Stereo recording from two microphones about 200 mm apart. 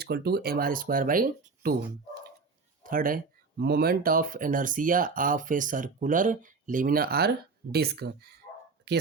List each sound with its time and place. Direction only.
0.0 s speech: 50° right (ahead or behind)
2.8 s speech: 45° right (ahead or behind)